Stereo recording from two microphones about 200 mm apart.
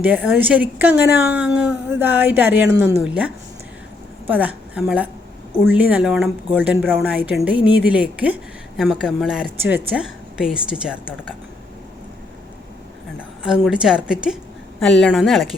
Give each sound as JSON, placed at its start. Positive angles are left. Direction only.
{"t": 0.0, "sound": "a woman's voice", "side_deg": -5}
{"t": 13.4, "sound": "a woman's voice", "side_deg": -5}